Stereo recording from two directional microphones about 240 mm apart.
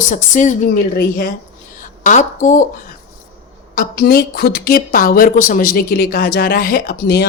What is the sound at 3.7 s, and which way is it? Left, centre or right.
A woman's voice, left.